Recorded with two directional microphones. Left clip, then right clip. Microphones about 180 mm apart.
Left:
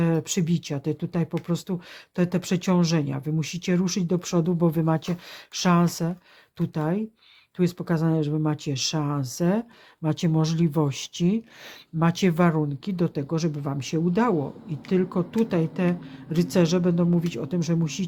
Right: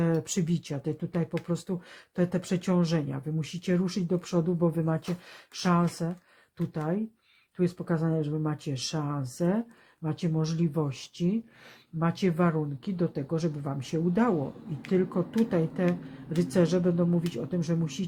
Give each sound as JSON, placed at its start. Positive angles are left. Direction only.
{"t": 0.0, "sound": "speech", "side_deg": 25}